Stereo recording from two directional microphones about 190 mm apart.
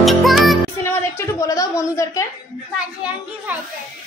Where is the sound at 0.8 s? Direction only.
15° left (ahead or behind).